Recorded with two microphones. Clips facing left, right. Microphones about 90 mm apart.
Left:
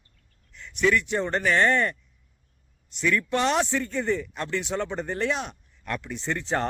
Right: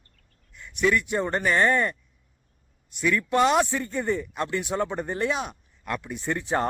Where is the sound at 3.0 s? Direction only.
10° right (ahead or behind).